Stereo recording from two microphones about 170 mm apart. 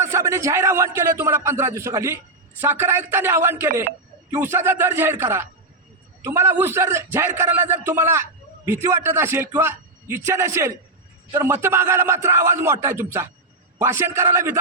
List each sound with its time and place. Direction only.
0.0 s speech: 15° right (ahead or behind)